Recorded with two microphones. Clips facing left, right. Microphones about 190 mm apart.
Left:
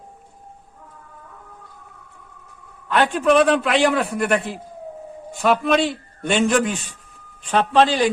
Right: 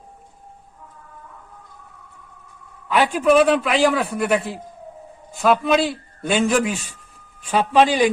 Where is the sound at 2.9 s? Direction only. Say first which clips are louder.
Right 1 dB; 5° right (ahead or behind).